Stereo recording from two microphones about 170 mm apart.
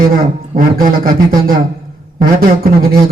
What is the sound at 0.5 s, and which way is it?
Speech, 55° right (ahead or behind).